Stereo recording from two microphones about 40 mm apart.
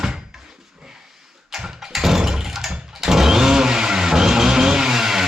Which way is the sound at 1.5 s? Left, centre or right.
Centre.